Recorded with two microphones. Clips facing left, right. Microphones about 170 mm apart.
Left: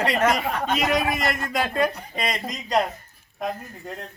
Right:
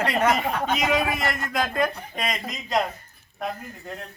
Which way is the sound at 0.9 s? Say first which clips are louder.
Left 1 dB; 5° left (ahead or behind).